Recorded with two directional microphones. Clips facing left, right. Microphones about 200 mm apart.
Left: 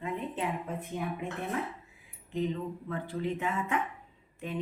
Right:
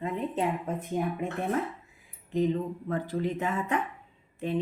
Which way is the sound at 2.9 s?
40° right (ahead or behind).